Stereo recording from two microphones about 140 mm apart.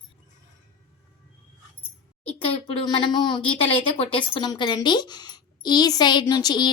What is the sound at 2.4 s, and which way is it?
A woman's voice, 40° left (ahead or behind).